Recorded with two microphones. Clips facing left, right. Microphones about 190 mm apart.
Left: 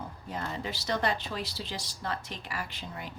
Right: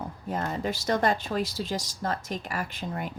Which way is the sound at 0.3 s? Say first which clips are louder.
Right 6 dB; 45° right (ahead or behind).